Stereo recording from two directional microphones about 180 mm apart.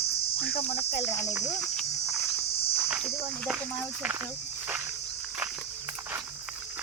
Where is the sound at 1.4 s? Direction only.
40° left (ahead or behind).